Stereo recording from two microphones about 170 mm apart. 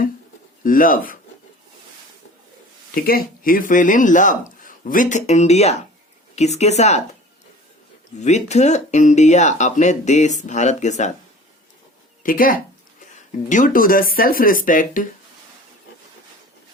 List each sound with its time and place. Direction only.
0.6 s speech: 55° left (ahead or behind)
2.9 s a woman's voice: 60° left (ahead or behind); by 7.0 s 40° left (ahead or behind)
8.2 s speech: 40° left (ahead or behind)
12.2 s speech: 55° left (ahead or behind)